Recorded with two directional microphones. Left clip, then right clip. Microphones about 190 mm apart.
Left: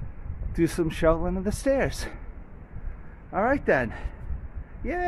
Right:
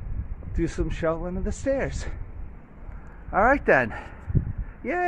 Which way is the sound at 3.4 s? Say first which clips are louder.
Right 4 dB; 5° left (ahead or behind).